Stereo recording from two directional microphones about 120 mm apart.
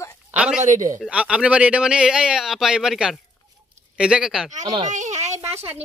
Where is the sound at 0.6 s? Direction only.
90° right.